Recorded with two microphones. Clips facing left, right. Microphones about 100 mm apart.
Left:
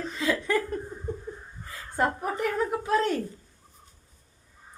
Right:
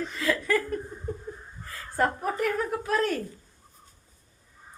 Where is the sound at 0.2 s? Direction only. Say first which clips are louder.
Even; 20° left (ahead or behind).